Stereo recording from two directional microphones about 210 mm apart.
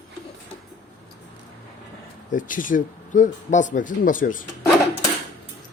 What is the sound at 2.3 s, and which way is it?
Speech, 40° left (ahead or behind).